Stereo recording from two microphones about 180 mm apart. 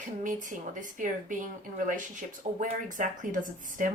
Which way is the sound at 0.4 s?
45° right (ahead or behind).